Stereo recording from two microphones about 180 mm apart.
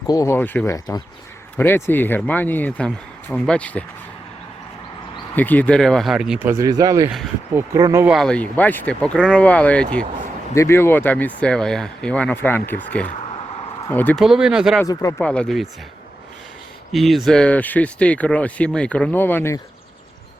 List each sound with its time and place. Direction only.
0.1 s speech: 15° left (ahead or behind)
5.3 s speech: 10° left (ahead or behind); by 8.0 s 20° right (ahead or behind)
8.0 s speech: centre (ahead or behind)
14.2 s speech: 5° right (ahead or behind)
16.9 s speech: centre (ahead or behind)